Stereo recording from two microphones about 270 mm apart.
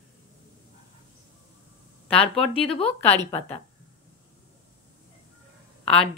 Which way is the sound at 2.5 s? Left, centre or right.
Left.